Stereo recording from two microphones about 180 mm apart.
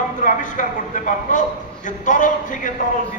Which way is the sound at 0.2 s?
45° left (ahead or behind).